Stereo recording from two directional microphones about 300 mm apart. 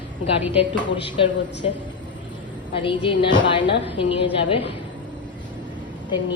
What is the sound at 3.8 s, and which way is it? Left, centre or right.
Speech, centre.